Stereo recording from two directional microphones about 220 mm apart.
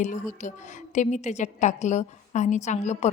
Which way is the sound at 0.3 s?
35° left (ahead or behind).